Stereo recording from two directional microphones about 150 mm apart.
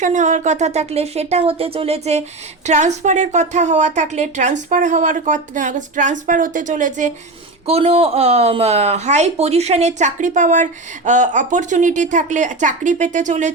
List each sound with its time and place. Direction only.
0.0 s a woman's voice: 55° right (ahead or behind)
7.7 s speech: 40° right (ahead or behind)